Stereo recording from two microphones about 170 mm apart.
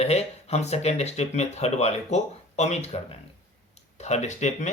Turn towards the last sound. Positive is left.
turn(degrees=45)  # may be behind; listen again after turning